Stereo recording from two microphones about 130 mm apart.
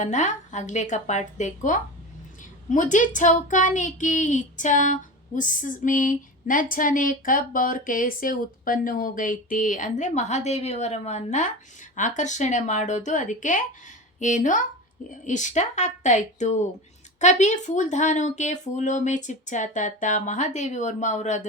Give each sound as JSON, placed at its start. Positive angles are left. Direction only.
{"t": 0.0, "sound": "speech", "side_deg": 65}